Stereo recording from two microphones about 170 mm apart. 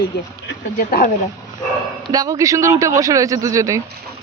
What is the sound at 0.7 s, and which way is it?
Speech, 55° left (ahead or behind).